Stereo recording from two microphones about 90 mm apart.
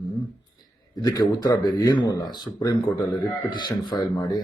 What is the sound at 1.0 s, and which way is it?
Speech, 45° left (ahead or behind).